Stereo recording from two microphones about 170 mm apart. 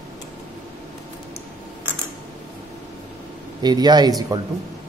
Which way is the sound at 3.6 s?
25° right (ahead or behind).